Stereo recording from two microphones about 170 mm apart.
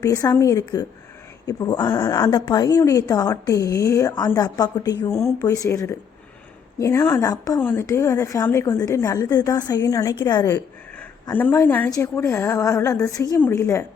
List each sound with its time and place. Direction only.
0.0 s a woman's voice: 20° left (ahead or behind)